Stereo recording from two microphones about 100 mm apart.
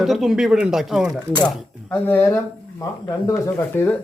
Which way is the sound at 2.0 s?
25° left (ahead or behind).